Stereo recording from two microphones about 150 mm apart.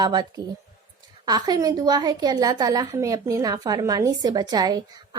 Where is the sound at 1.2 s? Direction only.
25° right (ahead or behind).